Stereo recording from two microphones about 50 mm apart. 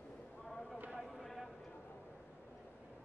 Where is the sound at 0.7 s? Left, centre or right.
Right.